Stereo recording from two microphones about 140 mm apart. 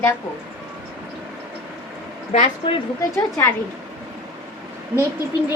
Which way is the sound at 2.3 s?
50° left (ahead or behind).